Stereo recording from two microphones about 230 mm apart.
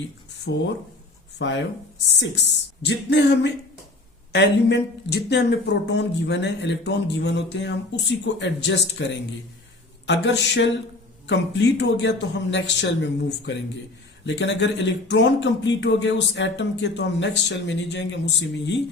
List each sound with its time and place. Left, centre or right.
0.5 s speech: left